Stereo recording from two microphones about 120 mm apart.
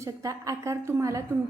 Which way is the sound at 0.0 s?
25° right (ahead or behind).